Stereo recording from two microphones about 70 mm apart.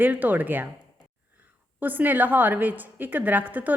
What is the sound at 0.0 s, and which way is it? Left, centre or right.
Speech, right.